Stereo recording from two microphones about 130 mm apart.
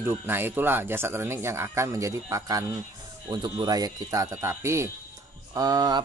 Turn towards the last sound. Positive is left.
turn(degrees=-30)  # may be behind; listen again after turning